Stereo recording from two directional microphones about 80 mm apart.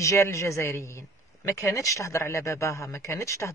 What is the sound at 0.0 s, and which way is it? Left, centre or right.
Speech, left.